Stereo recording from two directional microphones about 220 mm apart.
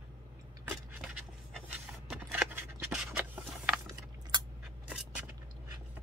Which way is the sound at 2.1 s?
5° right (ahead or behind).